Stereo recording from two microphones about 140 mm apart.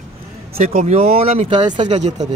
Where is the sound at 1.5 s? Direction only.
35° right (ahead or behind).